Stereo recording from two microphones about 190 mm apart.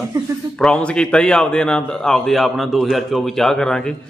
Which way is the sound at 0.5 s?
5° left (ahead or behind).